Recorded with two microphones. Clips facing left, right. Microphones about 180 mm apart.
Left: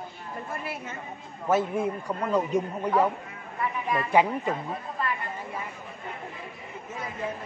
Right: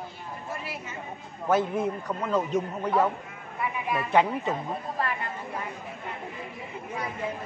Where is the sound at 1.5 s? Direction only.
5° left (ahead or behind).